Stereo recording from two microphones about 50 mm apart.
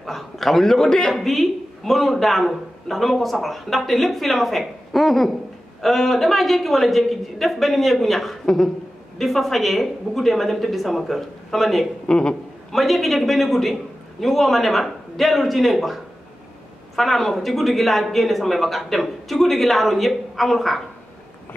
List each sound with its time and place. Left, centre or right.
0.0 s a man's voice: centre
1.1 s a man's voice: centre
12.1 s a man's voice: centre
12.7 s a man's voice: centre